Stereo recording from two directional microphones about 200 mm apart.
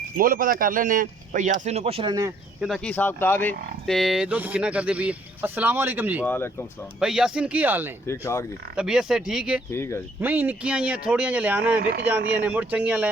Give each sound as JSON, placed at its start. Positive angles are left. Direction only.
{"t": 0.2, "sound": "speech", "side_deg": -45}
{"t": 2.6, "sound": "speech", "side_deg": 0}
{"t": 6.2, "sound": "speech", "side_deg": 10}
{"t": 7.0, "sound": "speech", "side_deg": -5}
{"t": 8.0, "sound": "speech", "side_deg": 15}
{"t": 8.7, "sound": "speech", "side_deg": -5}
{"t": 9.7, "sound": "speech", "side_deg": 15}
{"t": 10.2, "sound": "speech", "side_deg": -10}
{"t": 11.8, "sound": "speech", "side_deg": -50}
{"t": 12.0, "sound": "speech", "side_deg": -10}